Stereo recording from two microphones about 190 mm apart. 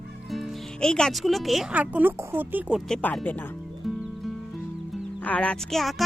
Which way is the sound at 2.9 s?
5° left (ahead or behind).